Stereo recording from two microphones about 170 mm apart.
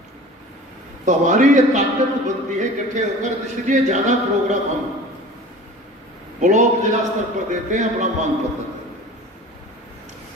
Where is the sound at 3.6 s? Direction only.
45° right (ahead or behind).